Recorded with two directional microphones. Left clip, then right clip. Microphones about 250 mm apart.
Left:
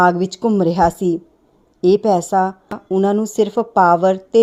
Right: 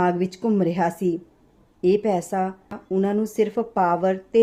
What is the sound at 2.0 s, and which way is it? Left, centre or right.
Speech, left.